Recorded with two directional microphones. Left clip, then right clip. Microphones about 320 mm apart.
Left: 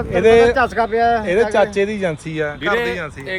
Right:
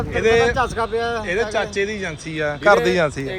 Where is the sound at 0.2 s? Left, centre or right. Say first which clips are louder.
Left 5 dB; centre.